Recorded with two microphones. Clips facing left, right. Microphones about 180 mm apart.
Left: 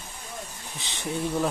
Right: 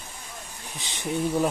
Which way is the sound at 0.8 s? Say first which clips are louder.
Right 3 dB; 15° right (ahead or behind).